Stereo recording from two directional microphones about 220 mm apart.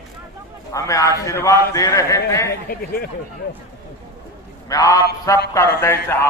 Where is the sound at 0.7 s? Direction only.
15° left (ahead or behind).